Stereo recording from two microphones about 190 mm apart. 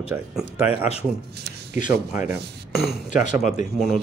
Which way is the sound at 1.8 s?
45° left (ahead or behind).